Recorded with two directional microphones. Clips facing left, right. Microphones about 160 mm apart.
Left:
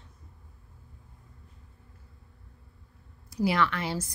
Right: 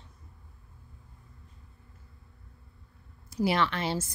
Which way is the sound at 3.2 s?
25° right (ahead or behind).